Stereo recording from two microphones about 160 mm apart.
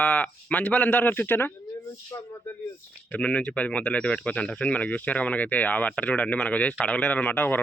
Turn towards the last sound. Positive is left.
turn(degrees=10)  # may be behind; listen again after turning